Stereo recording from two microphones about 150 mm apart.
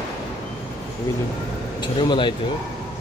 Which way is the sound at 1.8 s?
30° left (ahead or behind).